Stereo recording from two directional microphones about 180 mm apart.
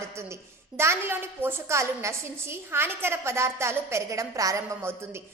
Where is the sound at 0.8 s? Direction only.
15° right (ahead or behind).